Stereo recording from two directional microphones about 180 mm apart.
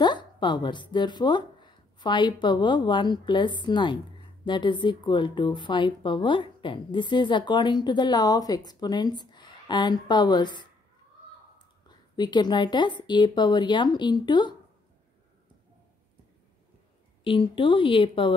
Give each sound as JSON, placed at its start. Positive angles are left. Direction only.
{"t": 0.0, "sound": "a woman's voice", "side_deg": 25}
{"t": 17.2, "sound": "a woman's voice", "side_deg": 30}